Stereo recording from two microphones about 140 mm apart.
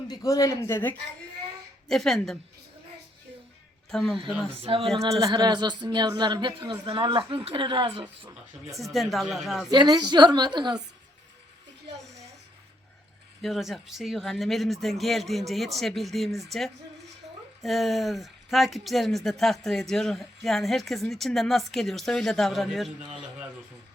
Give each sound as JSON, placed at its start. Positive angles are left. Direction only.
{"t": 0.1, "sound": "speech", "side_deg": 25}
{"t": 1.9, "sound": "speech", "side_deg": 0}
{"t": 3.9, "sound": "speech", "side_deg": 0}
{"t": 4.5, "sound": "speech", "side_deg": -45}
{"t": 5.2, "sound": "a woman's voice", "side_deg": -30}
{"t": 8.8, "sound": "speech", "side_deg": 0}
{"t": 9.6, "sound": "a woman's voice", "side_deg": -30}
{"t": 13.4, "sound": "speech", "side_deg": 0}